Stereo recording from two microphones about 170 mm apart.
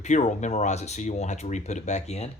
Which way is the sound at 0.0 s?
45° left (ahead or behind).